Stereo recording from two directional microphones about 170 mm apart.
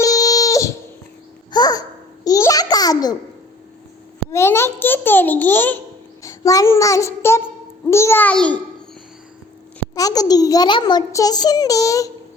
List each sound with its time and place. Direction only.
0.0 s a sound: 20° left (ahead or behind)
1.5 s babbling: 25° left (ahead or behind)
4.3 s babbling: 15° left (ahead or behind)
6.2 s child singing: 20° left (ahead or behind)
7.9 s a child's voice: 15° left (ahead or behind)
9.9 s a child's voice: 20° left (ahead or behind)